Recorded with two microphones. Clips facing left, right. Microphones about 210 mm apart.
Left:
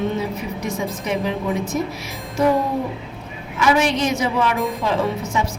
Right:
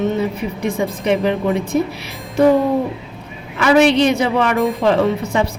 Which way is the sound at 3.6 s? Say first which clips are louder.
Right 6 dB; 65° right (ahead or behind).